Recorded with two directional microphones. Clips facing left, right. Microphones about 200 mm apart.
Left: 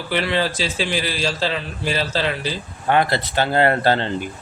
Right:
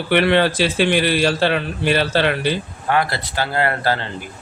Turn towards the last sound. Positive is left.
turn(degrees=25)  # may be behind; listen again after turning